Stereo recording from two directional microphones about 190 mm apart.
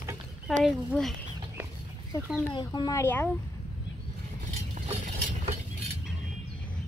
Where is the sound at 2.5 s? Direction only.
25° left (ahead or behind).